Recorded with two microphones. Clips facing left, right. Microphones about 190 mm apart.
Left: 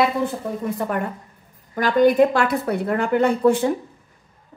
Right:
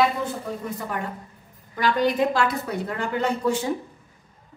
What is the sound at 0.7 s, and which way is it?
A woman's voice, 55° left (ahead or behind).